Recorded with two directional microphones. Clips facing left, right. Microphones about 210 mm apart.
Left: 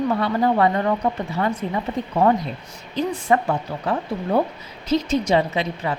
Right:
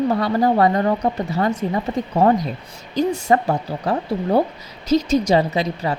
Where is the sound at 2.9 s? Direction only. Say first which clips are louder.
Right 3 dB; 40° right (ahead or behind).